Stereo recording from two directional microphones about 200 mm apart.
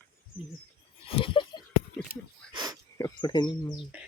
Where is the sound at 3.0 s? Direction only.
20° left (ahead or behind).